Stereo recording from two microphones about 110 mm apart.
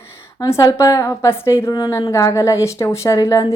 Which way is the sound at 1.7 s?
35° left (ahead or behind).